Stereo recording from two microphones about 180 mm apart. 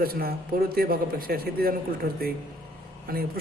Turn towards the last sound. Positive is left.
turn(degrees=-55)  # may be behind; listen again after turning